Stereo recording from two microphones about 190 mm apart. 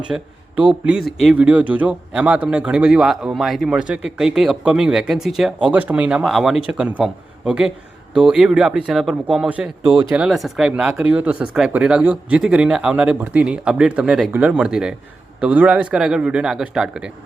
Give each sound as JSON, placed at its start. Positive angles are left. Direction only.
{"t": 0.1, "sound": "speech", "side_deg": -5}